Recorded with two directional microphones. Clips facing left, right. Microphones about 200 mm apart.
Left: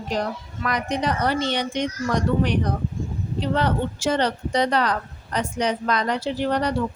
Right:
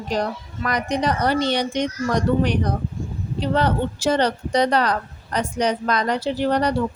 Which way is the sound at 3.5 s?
35° right (ahead or behind).